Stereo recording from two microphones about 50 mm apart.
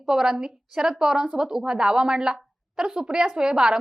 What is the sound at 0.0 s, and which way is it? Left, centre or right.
A woman's voice, centre.